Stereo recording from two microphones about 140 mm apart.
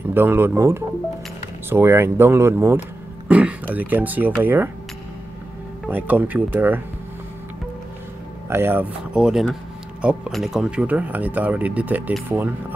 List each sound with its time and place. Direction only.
0.1 s speech: 15° right (ahead or behind)
5.9 s speech: 10° right (ahead or behind)
8.5 s speech: 15° right (ahead or behind)